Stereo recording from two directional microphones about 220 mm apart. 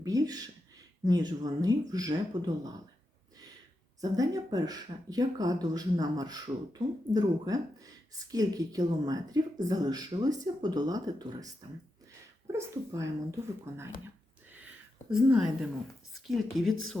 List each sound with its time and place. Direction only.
0.0 s speech: 15° right (ahead or behind)
4.0 s speech: 15° right (ahead or behind)
15.1 s speech: centre (ahead or behind)